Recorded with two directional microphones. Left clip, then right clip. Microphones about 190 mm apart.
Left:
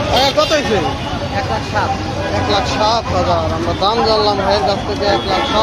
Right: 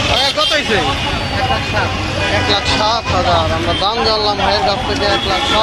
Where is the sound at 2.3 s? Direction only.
Centre (ahead or behind).